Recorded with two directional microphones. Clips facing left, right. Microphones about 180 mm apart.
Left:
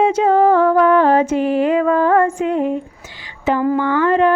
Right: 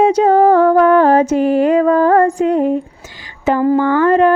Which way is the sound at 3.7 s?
45° right (ahead or behind).